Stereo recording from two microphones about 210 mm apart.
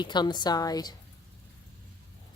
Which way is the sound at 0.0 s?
20° left (ahead or behind).